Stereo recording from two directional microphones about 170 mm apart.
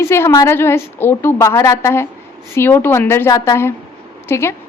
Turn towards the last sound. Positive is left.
turn(degrees=15)  # may be behind; listen again after turning